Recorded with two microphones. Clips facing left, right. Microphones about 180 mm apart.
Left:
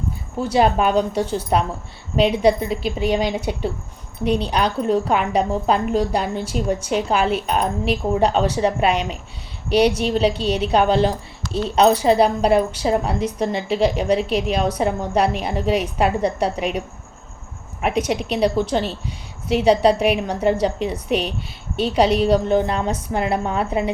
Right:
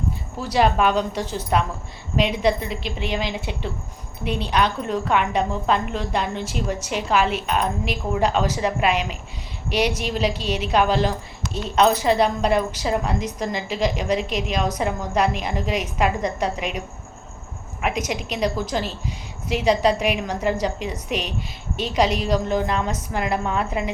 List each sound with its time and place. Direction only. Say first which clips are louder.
0.5 s a woman's voice: left 2 dB; 35° left (ahead or behind)
17.8 s a woman's voice: left 5 dB; 35° left (ahead or behind)